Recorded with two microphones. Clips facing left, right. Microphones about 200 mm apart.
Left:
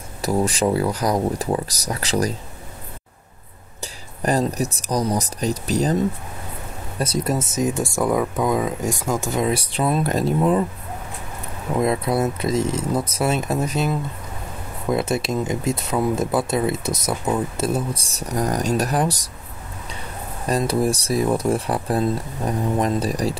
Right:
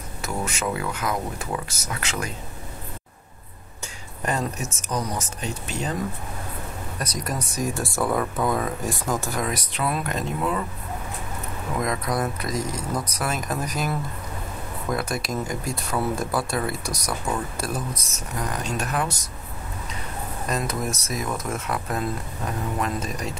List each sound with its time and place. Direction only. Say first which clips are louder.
0.2 s speech: left 8 dB; 35° left (ahead or behind)
3.8 s speech: left 6 dB; 35° left (ahead or behind)
7.0 s speech: left 8 dB; 25° left (ahead or behind)
11.8 s speech: left 6 dB; 30° left (ahead or behind)
20.4 s speech: left 8 dB; 30° left (ahead or behind)